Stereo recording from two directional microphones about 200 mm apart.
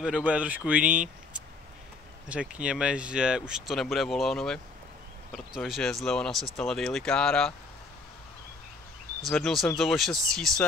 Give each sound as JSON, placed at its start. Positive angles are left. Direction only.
{"t": 0.0, "sound": "speech", "side_deg": -5}
{"t": 2.2, "sound": "speech", "side_deg": -5}
{"t": 9.2, "sound": "speech", "side_deg": 0}